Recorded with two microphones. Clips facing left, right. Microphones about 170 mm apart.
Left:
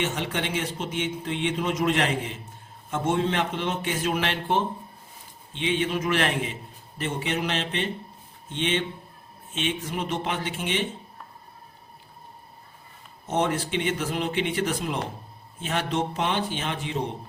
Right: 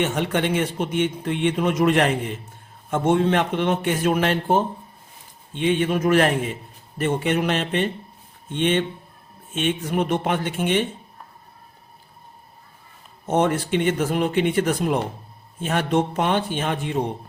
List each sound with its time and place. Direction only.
0.0 s a man's voice: 55° right (ahead or behind)
13.2 s speech: 55° right (ahead or behind)